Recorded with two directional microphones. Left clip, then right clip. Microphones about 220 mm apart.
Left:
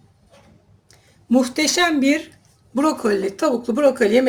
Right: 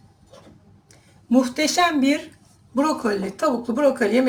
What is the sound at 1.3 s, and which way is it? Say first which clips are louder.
Speech: left 1 dB; 50° left (ahead or behind).